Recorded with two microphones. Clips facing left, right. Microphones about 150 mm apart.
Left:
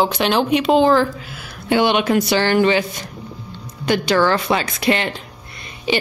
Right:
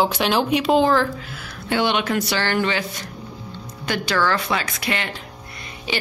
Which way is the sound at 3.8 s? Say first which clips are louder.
Left 6 dB; 20° left (ahead or behind).